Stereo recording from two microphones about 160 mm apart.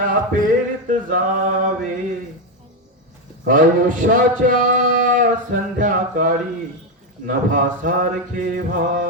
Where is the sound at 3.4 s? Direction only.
60° right (ahead or behind).